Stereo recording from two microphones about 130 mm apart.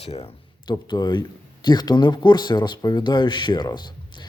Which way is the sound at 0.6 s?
30° left (ahead or behind).